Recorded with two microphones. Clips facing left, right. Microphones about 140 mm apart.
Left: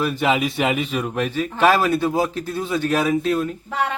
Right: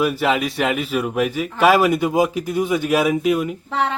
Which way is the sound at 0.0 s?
10° right (ahead or behind).